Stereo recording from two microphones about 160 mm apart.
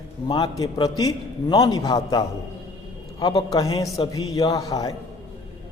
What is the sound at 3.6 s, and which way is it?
A man's voice, 20° left (ahead or behind).